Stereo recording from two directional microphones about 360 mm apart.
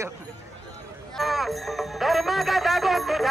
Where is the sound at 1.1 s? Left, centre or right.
Centre.